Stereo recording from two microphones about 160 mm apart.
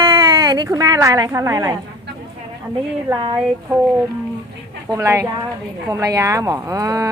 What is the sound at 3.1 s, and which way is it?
Speech, 30° right (ahead or behind).